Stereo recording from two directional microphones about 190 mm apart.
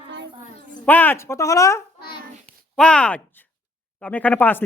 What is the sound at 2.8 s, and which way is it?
A woman's voice, 5° left (ahead or behind).